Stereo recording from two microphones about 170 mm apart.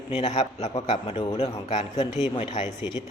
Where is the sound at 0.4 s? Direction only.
30° left (ahead or behind).